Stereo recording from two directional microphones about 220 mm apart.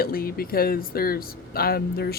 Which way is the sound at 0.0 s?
40° left (ahead or behind).